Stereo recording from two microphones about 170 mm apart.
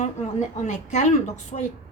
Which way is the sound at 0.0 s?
45° left (ahead or behind).